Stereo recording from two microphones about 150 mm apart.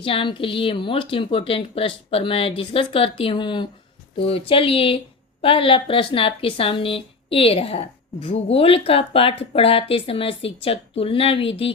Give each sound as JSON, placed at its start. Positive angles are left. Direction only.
{"t": 0.0, "sound": "speech", "side_deg": 35}